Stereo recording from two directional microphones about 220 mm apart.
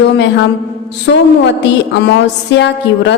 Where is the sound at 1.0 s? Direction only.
55° left (ahead or behind).